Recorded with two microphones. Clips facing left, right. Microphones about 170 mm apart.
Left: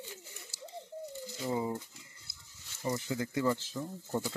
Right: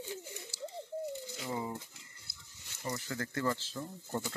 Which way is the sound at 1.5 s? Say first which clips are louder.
Left 4 dB; 15° left (ahead or behind).